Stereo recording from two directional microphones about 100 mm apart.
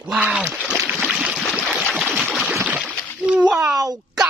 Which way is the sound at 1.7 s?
10° right (ahead or behind).